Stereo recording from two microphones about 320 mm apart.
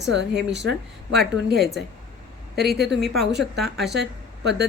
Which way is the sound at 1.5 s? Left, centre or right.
Centre.